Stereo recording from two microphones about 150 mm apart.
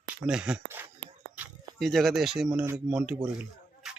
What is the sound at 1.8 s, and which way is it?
Speech, centre (ahead or behind).